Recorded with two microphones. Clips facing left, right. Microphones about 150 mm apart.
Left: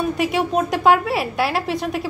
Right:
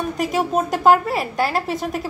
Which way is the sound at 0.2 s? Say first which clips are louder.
Right 2 dB; centre (ahead or behind).